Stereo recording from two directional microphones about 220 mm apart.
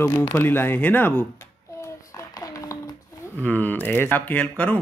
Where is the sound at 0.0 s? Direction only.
10° left (ahead or behind).